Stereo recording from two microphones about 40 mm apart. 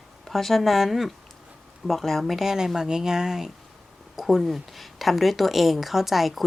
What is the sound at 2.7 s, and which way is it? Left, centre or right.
Speech, centre.